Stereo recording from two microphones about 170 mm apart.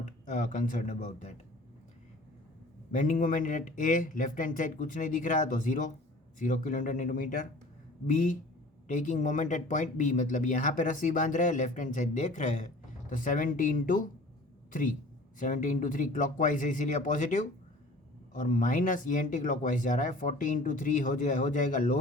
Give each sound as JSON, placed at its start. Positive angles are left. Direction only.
{"t": 0.0, "sound": "speech", "side_deg": 45}
{"t": 2.9, "sound": "speech", "side_deg": 50}
{"t": 15.4, "sound": "speech", "side_deg": 50}